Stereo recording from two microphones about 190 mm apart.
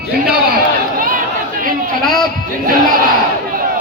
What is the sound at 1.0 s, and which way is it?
Chatter, 45° right (ahead or behind).